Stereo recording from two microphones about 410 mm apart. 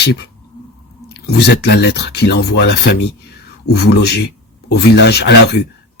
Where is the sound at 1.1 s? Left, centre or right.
Left.